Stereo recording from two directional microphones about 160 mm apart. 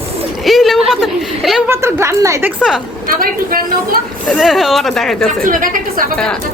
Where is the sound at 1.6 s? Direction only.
15° right (ahead or behind).